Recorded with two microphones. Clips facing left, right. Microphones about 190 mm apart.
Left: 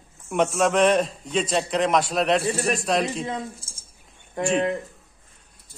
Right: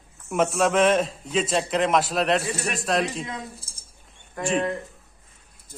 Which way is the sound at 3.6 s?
35° right (ahead or behind).